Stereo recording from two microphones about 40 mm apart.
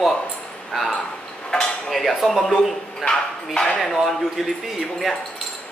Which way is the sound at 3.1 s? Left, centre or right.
Left.